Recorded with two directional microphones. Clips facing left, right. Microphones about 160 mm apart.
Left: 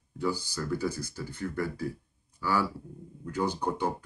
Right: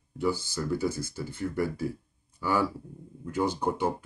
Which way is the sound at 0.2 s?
20° right (ahead or behind).